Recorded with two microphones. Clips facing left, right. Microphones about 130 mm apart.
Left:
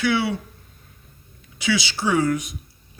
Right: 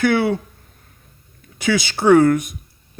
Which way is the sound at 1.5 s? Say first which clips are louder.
Right 4 dB; 50° right (ahead or behind).